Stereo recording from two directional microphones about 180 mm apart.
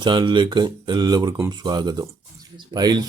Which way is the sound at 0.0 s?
25° right (ahead or behind).